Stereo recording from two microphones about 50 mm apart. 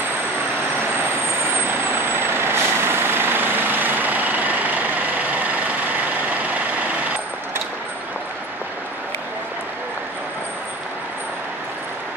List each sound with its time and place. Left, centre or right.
1.7 s vehicle: right